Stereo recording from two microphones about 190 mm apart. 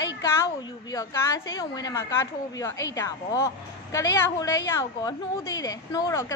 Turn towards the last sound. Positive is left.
turn(degrees=15)  # may be behind; listen again after turning